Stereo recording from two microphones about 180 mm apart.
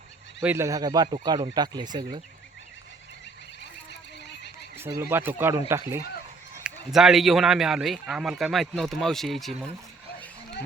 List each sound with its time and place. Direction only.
0.4 s speech: 15° right (ahead or behind)
4.8 s a man's voice: 15° right (ahead or behind)